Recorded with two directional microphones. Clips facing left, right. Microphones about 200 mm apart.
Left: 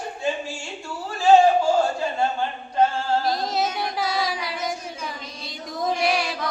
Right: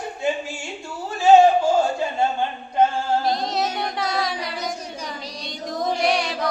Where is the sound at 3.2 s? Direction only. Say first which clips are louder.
Right 1 dB; centre (ahead or behind).